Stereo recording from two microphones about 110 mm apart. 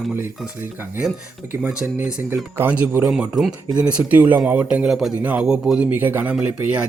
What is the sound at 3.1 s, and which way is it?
Speech, 5° right (ahead or behind).